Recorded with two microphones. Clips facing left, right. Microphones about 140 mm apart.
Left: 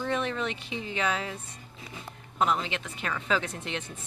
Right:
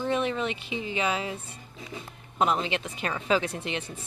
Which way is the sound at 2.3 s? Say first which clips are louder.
Right 2 dB; 20° right (ahead or behind).